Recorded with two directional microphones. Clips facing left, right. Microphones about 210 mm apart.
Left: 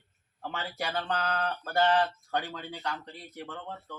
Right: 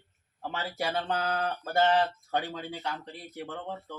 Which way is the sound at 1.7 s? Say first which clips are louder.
Right 1 dB; 25° right (ahead or behind).